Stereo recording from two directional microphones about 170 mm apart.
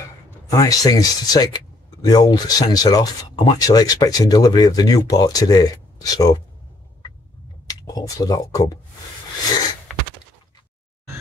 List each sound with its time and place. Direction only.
0.5 s speech: 20° left (ahead or behind)
7.6 s speech: 20° left (ahead or behind)